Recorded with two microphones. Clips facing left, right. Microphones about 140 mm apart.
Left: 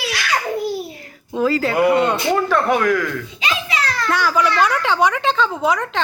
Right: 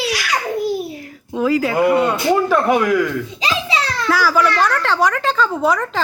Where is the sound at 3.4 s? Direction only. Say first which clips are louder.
Right 1 dB; 30° right (ahead or behind).